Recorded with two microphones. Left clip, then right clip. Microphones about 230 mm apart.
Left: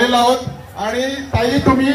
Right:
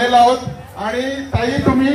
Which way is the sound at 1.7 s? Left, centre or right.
Left.